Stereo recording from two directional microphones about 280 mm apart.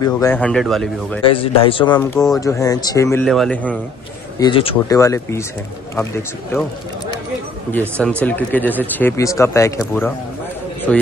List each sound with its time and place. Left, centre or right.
0.0 s speech: centre
1.2 s speech: centre
4.4 s speech: centre
8.0 s speech: centre